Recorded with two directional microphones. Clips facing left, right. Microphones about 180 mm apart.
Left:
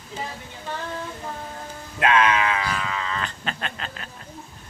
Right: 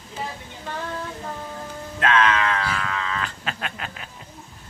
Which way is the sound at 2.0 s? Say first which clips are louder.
Left 1 dB; 15° left (ahead or behind).